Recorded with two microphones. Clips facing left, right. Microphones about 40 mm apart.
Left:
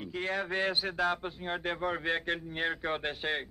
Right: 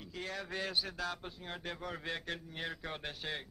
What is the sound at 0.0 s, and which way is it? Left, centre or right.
Speech, left.